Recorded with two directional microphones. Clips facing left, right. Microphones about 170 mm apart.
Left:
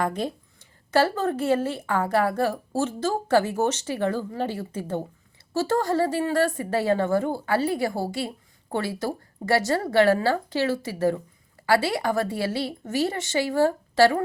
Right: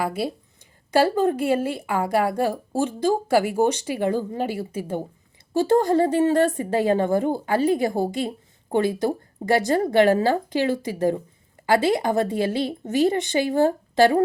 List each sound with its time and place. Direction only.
0.0 s a woman's voice: 5° right (ahead or behind)